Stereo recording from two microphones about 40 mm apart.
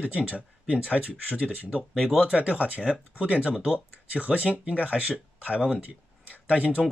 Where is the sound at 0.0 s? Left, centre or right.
Right.